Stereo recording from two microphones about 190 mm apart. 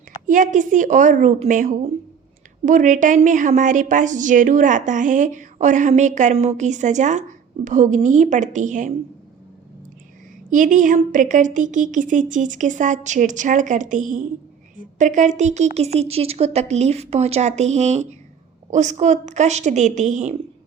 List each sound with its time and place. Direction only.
0.3 s a woman's voice: 45° right (ahead or behind)
10.5 s a woman's voice: 45° right (ahead or behind)